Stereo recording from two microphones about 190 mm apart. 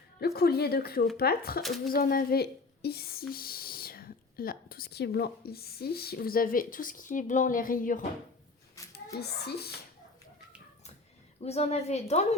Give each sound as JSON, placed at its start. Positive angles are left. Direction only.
{"t": 0.2, "sound": "speech", "side_deg": 55}
{"t": 9.1, "sound": "speech", "side_deg": 60}
{"t": 11.3, "sound": "a woman's voice", "side_deg": 35}